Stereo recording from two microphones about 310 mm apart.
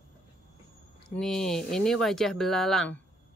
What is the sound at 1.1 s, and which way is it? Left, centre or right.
Speech, centre.